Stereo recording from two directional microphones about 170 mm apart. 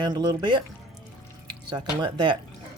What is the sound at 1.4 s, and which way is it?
Drip, 25° right (ahead or behind).